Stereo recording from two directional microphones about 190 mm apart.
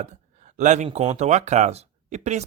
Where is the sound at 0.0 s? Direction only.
40° right (ahead or behind).